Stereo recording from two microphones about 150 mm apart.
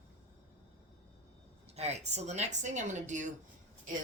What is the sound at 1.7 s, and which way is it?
A woman's voice, 45° right (ahead or behind).